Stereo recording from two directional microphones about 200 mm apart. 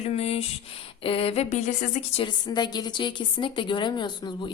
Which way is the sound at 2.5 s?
20° left (ahead or behind).